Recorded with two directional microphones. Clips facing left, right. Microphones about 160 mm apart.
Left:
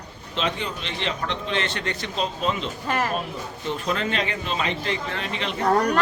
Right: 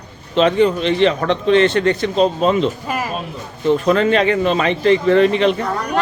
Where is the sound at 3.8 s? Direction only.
60° right (ahead or behind).